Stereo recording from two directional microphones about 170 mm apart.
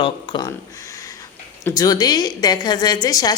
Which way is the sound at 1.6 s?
20° left (ahead or behind).